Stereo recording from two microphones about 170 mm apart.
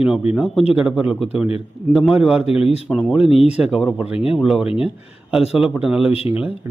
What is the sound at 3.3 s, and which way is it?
Speech, 35° left (ahead or behind).